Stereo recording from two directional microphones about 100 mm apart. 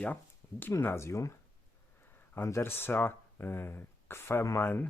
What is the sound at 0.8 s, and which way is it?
Speech, 25° left (ahead or behind).